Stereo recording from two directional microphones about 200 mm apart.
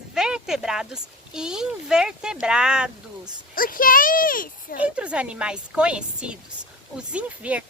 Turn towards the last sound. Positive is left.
turn(degrees=-5)  # may be behind; listen again after turning